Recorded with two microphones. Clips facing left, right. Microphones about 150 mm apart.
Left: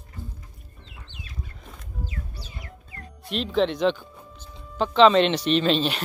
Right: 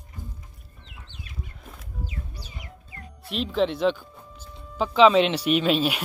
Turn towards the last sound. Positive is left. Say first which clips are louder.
# even
turn(degrees=-10)  # may be behind; listen again after turning